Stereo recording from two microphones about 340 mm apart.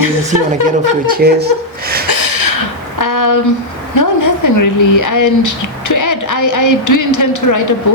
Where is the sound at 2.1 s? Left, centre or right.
Left.